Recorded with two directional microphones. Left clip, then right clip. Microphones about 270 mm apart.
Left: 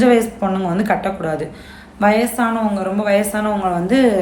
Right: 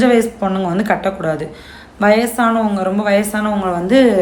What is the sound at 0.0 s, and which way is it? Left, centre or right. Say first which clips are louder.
A woman's voice: right 1 dB; centre.